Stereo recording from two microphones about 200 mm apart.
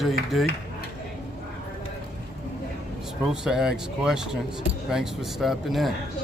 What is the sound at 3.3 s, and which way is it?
Speech, 5° right (ahead or behind).